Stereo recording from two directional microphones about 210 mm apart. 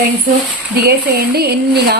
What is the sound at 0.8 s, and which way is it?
Speech, 50° right (ahead or behind).